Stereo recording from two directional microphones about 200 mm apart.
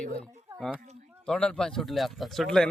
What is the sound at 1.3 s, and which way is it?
Speech, 5° left (ahead or behind).